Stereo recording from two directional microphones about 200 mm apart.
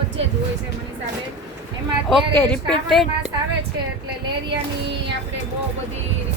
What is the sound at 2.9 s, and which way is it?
Speech, centre (ahead or behind).